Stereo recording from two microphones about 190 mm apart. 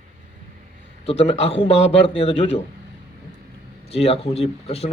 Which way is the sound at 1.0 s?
30° left (ahead or behind).